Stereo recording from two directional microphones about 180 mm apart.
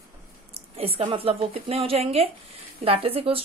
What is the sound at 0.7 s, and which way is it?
Speech, 35° right (ahead or behind).